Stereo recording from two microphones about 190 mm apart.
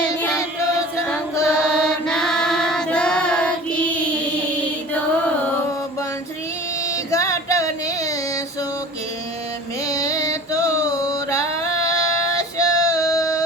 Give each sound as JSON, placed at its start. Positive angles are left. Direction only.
{"t": 0.0, "sound": "choir", "side_deg": 10}
{"t": 1.0, "sound": "female singing", "side_deg": 5}
{"t": 6.9, "sound": "music", "side_deg": 15}
{"t": 9.8, "sound": "a sound", "side_deg": 15}
{"t": 12.5, "sound": "female singing", "side_deg": 20}